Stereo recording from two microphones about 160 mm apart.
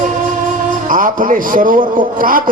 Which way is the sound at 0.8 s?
55° right (ahead or behind).